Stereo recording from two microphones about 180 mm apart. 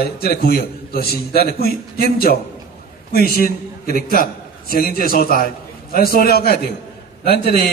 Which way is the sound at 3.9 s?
55° left (ahead or behind).